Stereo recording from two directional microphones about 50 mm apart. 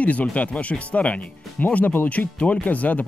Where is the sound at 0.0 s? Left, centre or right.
Left.